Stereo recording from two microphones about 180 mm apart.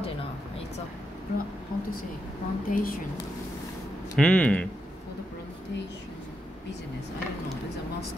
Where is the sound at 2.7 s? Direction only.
55° left (ahead or behind).